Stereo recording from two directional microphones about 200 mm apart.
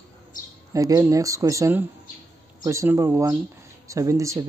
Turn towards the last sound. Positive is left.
turn(degrees=-15)  # may be behind; listen again after turning